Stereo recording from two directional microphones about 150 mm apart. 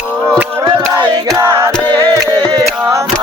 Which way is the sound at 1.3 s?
15° right (ahead or behind).